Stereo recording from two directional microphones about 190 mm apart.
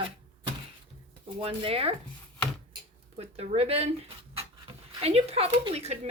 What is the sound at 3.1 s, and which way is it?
Speech, 30° right (ahead or behind).